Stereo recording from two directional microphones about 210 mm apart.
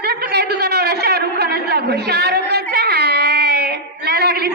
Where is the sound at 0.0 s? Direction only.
50° right (ahead or behind).